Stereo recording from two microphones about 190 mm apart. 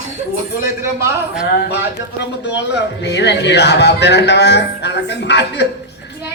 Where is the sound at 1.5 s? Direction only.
60° left (ahead or behind).